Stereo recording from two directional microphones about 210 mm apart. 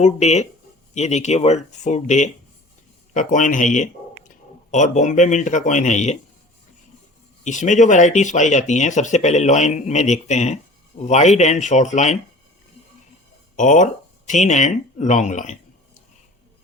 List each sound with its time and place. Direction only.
0.0 s speech: 30° left (ahead or behind)
7.4 s speech: 35° left (ahead or behind)
13.6 s speech: 35° left (ahead or behind)